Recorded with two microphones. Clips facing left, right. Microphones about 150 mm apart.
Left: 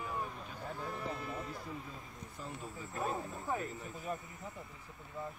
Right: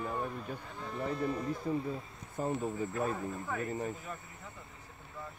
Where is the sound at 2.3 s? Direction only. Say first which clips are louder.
Right 13 dB; 50° right (ahead or behind).